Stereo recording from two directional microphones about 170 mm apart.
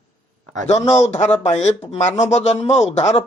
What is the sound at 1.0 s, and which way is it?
Speech, 40° left (ahead or behind).